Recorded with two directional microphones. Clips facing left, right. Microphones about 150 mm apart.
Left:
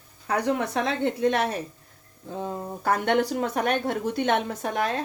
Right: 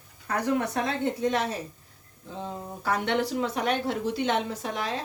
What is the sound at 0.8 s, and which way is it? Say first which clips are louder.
Speech: left 3 dB; 65° left (ahead or behind).